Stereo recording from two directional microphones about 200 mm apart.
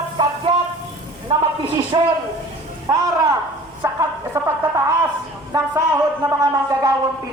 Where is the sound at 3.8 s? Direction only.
15° right (ahead or behind).